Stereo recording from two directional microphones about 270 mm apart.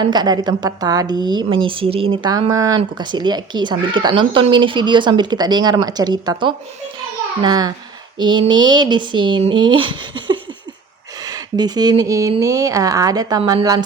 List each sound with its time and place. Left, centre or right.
0.0 s a woman's voice: centre